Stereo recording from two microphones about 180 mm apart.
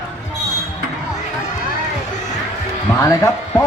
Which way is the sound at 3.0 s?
20° left (ahead or behind).